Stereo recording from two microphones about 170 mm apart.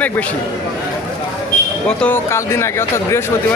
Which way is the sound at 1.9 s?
10° left (ahead or behind).